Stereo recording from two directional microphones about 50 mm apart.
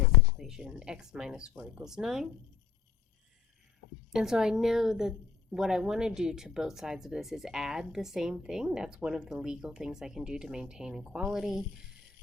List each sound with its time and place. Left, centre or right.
0.3 s speech: centre
1.5 s speech: right
1.8 s speech: centre
4.1 s speech: centre